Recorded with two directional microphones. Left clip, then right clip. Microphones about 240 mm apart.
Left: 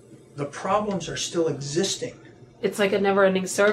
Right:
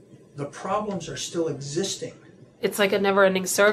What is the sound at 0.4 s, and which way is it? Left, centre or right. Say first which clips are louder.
Speech: left 3 dB; centre.